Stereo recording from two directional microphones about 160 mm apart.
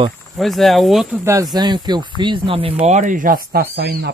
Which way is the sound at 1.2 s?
20° right (ahead or behind).